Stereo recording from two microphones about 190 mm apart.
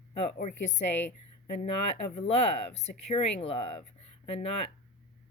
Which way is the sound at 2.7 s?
35° left (ahead or behind).